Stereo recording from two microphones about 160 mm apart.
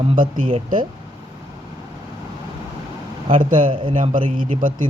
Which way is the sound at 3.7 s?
35° right (ahead or behind).